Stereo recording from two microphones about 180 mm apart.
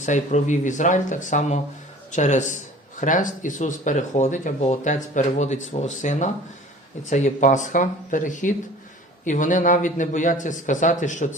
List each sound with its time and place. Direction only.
0.0 s a man's voice: 40° left (ahead or behind)